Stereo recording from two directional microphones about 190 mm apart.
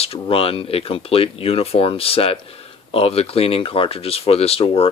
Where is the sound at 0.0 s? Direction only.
30° left (ahead or behind).